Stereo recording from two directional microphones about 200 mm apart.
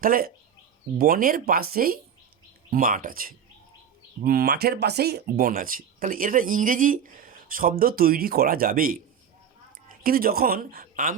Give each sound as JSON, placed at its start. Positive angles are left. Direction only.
{"t": 0.0, "sound": "speech", "side_deg": -45}
{"t": 10.0, "sound": "speech", "side_deg": -45}